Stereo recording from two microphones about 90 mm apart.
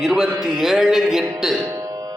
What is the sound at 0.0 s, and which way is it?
A man's voice, 5° right (ahead or behind).